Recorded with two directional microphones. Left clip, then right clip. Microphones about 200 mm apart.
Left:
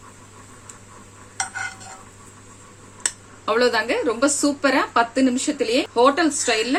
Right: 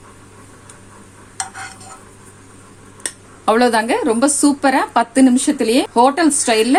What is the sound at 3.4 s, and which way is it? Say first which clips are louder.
A woman's voice: right 5 dB; 45° right (ahead or behind).